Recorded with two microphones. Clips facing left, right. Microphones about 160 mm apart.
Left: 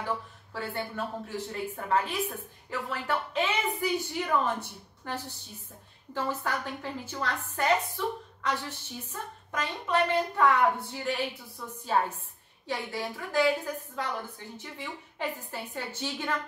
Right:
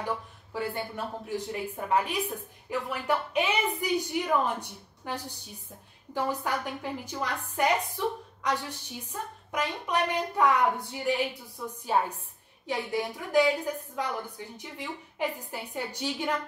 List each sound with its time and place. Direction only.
0.0 s speech: 15° right (ahead or behind)